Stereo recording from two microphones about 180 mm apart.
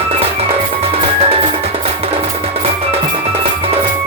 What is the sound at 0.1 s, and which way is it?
Music, 35° right (ahead or behind).